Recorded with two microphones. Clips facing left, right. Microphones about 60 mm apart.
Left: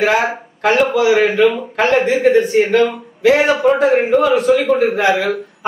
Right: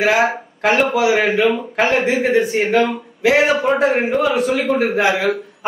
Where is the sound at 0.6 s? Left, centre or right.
Centre.